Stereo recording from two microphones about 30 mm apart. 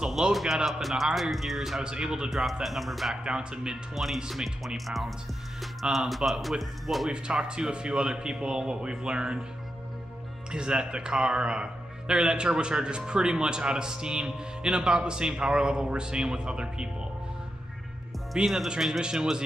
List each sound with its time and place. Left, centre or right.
0.3 s music: centre
1.8 s speech: right
2.6 s music: centre
3.3 s speech: right
3.9 s music: centre
4.3 s speech: centre
4.8 s music: centre
5.6 s speech: centre
6.6 s music: centre
7.1 s speech: right
10.5 s speech: right
18.3 s speech: centre
18.9 s speech: right